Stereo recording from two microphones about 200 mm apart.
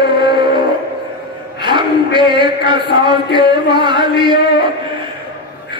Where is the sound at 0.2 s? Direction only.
25° right (ahead or behind).